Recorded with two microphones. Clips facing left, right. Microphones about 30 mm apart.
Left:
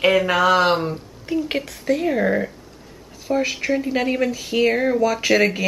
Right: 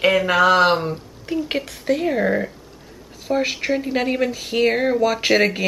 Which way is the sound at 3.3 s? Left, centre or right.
Centre.